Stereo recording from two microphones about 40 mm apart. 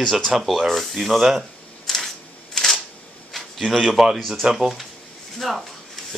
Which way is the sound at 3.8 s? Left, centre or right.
Centre.